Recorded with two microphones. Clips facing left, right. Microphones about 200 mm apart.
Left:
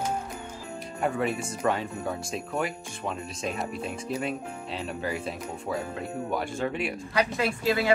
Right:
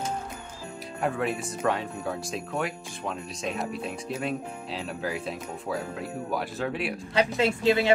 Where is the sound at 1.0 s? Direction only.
Centre (ahead or behind).